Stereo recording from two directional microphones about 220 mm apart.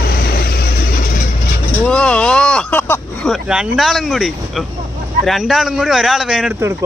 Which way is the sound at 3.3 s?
5° right (ahead or behind).